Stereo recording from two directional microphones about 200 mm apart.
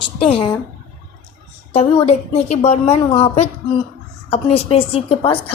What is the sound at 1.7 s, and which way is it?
A woman's voice, 30° left (ahead or behind).